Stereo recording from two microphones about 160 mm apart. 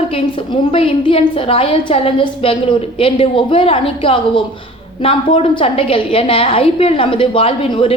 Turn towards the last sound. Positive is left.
turn(degrees=35)  # may be behind; listen again after turning